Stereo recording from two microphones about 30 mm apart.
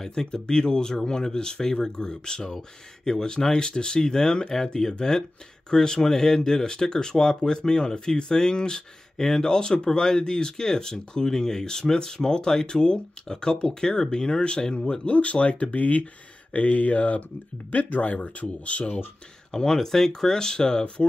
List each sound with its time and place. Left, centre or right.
0.1 s speech: left
5.7 s speech: left
9.2 s speech: centre
9.5 s speech: left
15.0 s speech: left
15.7 s speech: left
17.6 s speech: left
18.2 s speech: left
19.5 s speech: centre